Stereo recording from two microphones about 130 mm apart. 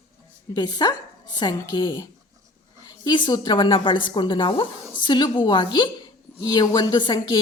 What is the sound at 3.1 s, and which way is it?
A woman's voice, 35° left (ahead or behind).